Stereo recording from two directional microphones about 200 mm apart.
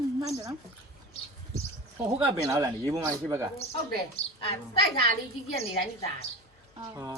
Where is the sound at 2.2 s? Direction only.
15° right (ahead or behind).